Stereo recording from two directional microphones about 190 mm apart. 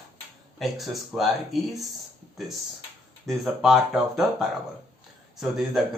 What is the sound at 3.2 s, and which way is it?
Speech, centre (ahead or behind).